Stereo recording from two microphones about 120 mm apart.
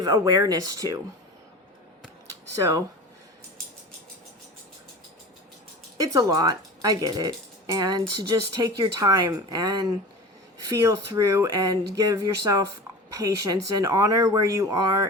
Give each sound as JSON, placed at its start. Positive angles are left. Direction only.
{"t": 0.0, "sound": "speech", "side_deg": -35}
{"t": 6.0, "sound": "speech", "side_deg": -30}